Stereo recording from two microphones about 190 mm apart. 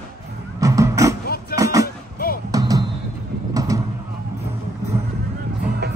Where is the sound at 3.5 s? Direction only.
15° right (ahead or behind).